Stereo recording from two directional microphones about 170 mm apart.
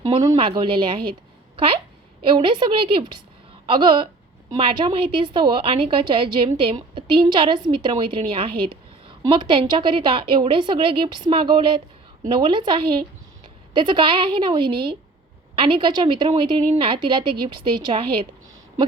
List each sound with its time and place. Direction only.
0.2 s a woman's voice: 25° right (ahead or behind)
2.2 s a woman's voice: 30° right (ahead or behind)